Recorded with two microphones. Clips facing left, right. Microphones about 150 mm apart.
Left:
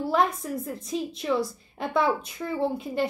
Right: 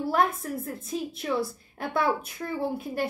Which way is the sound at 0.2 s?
Centre (ahead or behind).